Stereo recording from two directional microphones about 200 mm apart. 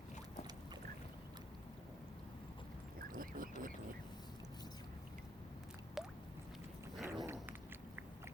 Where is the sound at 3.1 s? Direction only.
45° right (ahead or behind).